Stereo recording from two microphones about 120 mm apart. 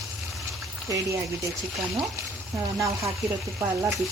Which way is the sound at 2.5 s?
25° right (ahead or behind).